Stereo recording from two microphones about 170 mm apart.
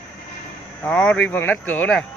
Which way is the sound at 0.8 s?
10° left (ahead or behind).